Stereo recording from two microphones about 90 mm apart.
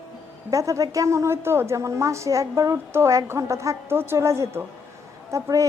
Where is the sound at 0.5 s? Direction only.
35° right (ahead or behind).